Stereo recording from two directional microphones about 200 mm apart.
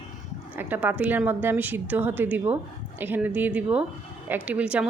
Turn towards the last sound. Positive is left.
turn(degrees=-5)  # may be behind; listen again after turning